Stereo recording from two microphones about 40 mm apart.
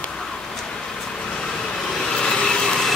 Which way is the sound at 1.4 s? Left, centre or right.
Centre.